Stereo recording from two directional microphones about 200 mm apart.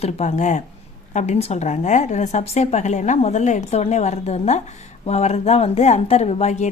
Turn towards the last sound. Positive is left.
turn(degrees=35)  # may be behind; listen again after turning